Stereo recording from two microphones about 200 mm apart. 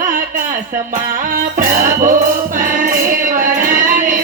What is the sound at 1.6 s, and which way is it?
Music, 40° right (ahead or behind).